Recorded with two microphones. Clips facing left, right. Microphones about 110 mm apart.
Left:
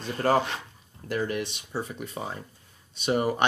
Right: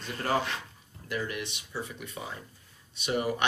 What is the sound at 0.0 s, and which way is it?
Speech, 40° left (ahead or behind).